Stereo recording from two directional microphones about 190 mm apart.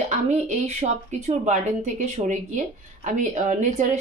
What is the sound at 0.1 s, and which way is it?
A woman's voice, 40° right (ahead or behind).